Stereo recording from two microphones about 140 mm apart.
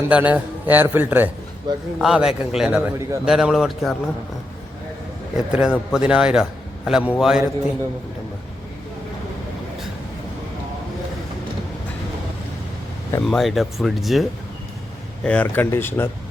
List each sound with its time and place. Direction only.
0.1 s speech: 10° right (ahead or behind)
1.7 s a man's voice: 35° right (ahead or behind)
2.0 s speech: 5° right (ahead or behind)
5.4 s a man's voice: 5° right (ahead or behind)
13.2 s speech: centre (ahead or behind); by 16.0 s 15° left (ahead or behind)